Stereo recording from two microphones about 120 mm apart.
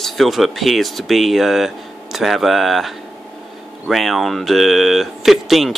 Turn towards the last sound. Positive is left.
turn(degrees=0)  # may be behind; listen again after turning